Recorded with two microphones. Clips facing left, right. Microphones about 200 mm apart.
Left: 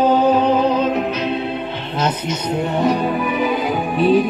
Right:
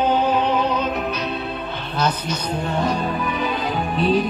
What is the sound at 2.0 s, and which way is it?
Speech, 20° left (ahead or behind).